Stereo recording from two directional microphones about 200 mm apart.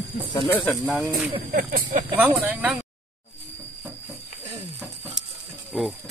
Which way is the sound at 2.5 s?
5° right (ahead or behind).